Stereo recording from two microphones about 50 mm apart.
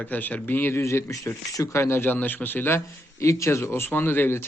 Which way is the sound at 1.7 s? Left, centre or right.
Left.